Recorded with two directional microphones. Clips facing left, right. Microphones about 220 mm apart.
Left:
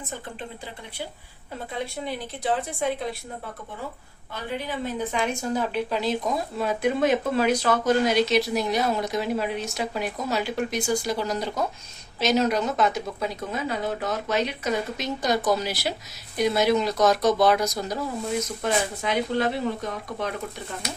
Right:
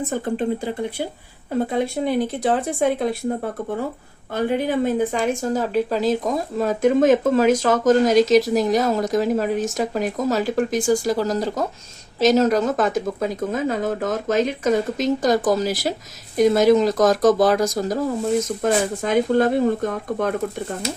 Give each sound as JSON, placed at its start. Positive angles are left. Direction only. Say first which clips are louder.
{"t": 0.1, "sound": "speech", "louder": "right 14 dB", "side_deg": -50}